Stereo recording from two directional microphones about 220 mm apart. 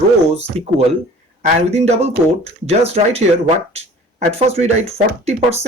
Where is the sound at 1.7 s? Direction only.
30° right (ahead or behind).